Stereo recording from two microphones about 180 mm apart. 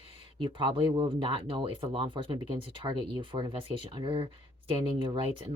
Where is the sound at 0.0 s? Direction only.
30° right (ahead or behind).